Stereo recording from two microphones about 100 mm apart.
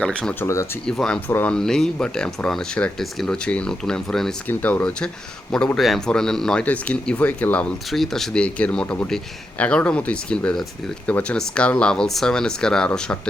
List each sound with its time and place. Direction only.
0.0 s speech: 10° left (ahead or behind)
0.3 s speech: 30° left (ahead or behind)
0.9 s speech: 5° left (ahead or behind)
1.3 s speech: 20° left (ahead or behind)
1.5 s a man's voice: 5° left (ahead or behind)
7.9 s speech: centre (ahead or behind)